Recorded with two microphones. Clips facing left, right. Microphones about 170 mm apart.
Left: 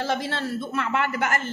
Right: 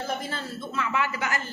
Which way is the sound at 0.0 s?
80° left.